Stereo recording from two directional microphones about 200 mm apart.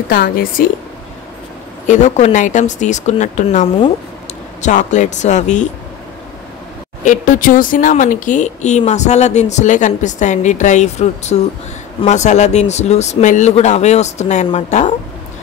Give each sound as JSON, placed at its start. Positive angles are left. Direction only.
{"t": 0.1, "sound": "a woman's voice", "side_deg": 45}
{"t": 1.9, "sound": "speech", "side_deg": 35}
{"t": 7.1, "sound": "speech", "side_deg": 40}